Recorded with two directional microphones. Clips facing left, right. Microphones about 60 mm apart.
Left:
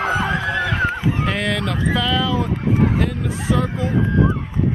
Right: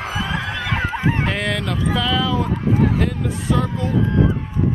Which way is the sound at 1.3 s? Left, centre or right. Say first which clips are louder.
Left 1 dB; centre.